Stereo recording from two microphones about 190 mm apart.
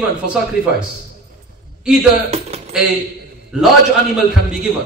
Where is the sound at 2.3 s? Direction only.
35° right (ahead or behind).